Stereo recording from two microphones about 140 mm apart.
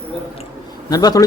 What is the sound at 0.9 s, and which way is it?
Speech, 25° left (ahead or behind).